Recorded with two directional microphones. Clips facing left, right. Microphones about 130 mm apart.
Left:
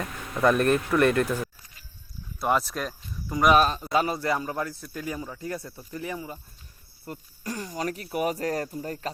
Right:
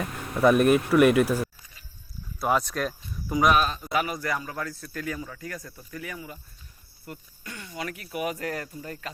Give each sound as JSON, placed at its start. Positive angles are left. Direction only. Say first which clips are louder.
{"t": 0.0, "sound": "speech", "louder": "right 2 dB", "side_deg": -10}
{"t": 2.4, "sound": "speech", "louder": "even", "side_deg": 0}
{"t": 3.6, "sound": "speech", "louder": "left 3 dB", "side_deg": 35}